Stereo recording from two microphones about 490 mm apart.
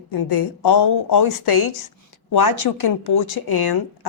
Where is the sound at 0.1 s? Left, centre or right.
Left.